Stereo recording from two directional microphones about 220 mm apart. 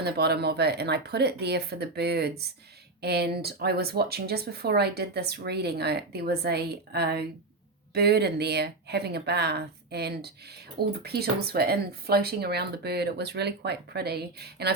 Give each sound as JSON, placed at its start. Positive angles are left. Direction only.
{"t": 0.0, "sound": "speech", "side_deg": -45}